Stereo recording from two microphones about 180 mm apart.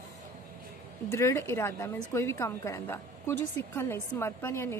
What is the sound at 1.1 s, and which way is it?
A woman's voice, 15° left (ahead or behind).